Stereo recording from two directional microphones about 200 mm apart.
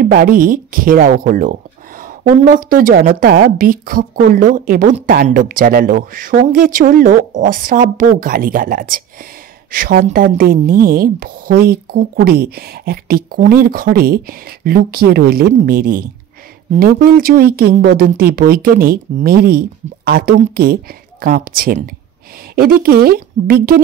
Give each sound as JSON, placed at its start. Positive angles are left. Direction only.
{"t": 0.0, "sound": "a woman's voice", "side_deg": -45}